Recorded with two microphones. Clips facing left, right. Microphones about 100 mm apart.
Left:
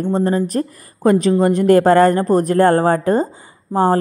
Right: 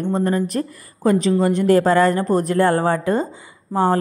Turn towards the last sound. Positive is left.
turn(degrees=40)  # may be behind; listen again after turning